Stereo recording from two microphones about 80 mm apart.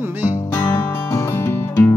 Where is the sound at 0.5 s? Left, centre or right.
Left.